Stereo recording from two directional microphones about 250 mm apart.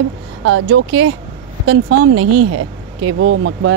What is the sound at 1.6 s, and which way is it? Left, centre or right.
Speech, right.